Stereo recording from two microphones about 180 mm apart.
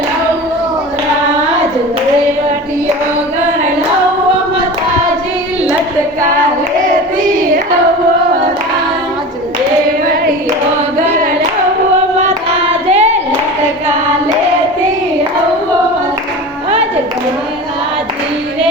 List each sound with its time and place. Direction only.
12.6 s singing: 35° right (ahead or behind)